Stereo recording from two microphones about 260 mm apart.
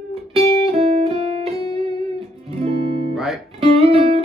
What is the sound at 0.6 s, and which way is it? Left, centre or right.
Music, right.